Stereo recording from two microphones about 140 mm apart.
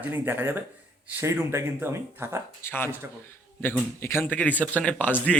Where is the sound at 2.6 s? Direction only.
15° left (ahead or behind).